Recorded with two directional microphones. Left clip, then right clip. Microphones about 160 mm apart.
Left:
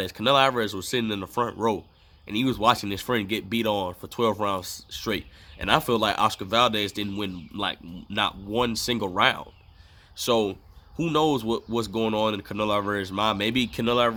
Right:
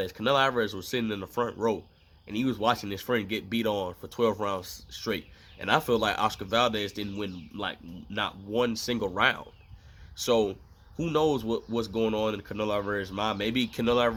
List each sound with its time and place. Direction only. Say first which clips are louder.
0.0 s speech: left 4 dB; 30° left (ahead or behind)